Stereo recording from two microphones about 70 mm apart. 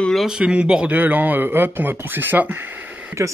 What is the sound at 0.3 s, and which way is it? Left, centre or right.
Speech, centre.